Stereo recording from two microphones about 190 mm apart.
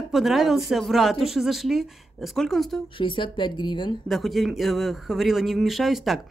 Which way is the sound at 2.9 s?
25° left (ahead or behind).